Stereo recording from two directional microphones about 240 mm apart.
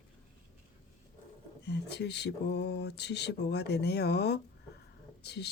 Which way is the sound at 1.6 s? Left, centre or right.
Left.